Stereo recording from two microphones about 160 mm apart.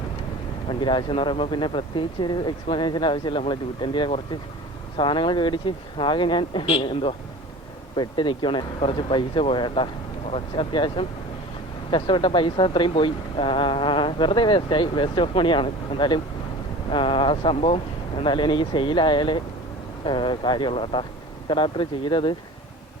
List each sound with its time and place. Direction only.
0.7 s speech: 30° left (ahead or behind)